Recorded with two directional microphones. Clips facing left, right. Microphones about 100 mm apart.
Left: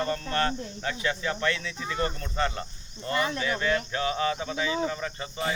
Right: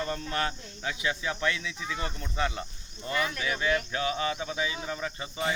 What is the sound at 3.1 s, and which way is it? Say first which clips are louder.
Speech: left 3 dB; 30° left (ahead or behind).